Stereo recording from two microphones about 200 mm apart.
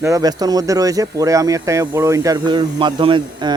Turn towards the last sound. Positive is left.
turn(degrees=-25)  # may be behind; listen again after turning